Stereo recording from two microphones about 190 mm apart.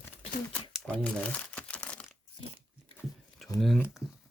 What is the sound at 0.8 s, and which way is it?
Crumpling, 5° left (ahead or behind).